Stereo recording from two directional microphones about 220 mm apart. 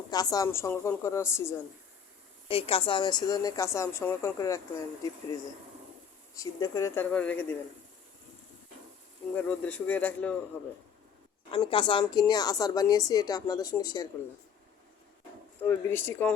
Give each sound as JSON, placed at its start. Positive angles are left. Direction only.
{"t": 0.1, "sound": "speech", "side_deg": 15}
{"t": 2.5, "sound": "speech", "side_deg": 25}
{"t": 6.3, "sound": "speech", "side_deg": 15}
{"t": 9.3, "sound": "speech", "side_deg": 5}
{"t": 11.5, "sound": "speech", "side_deg": 20}
{"t": 15.6, "sound": "speech", "side_deg": 10}